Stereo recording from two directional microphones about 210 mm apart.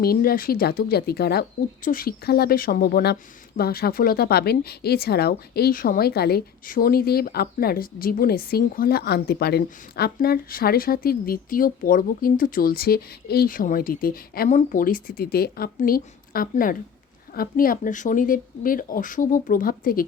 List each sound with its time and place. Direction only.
0.0 s speech: 45° left (ahead or behind)